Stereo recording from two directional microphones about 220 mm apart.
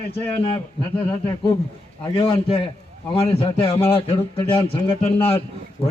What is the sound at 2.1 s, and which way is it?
A man's voice, 25° left (ahead or behind).